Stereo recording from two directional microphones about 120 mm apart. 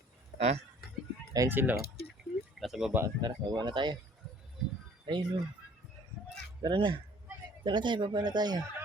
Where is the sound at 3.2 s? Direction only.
35° right (ahead or behind).